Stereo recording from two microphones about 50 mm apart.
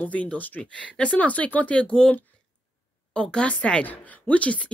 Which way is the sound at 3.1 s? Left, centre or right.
Centre.